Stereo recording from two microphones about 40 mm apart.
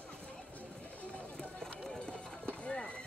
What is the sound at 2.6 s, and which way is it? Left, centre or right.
Run, left.